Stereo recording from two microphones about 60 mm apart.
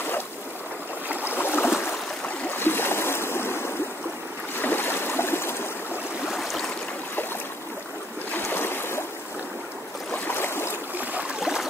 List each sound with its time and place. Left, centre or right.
1.3 s boat: left
2.5 s a sound: left
4.6 s boat: left
6.3 s stream: centre
8.5 s boat: left
10.2 s a sound: left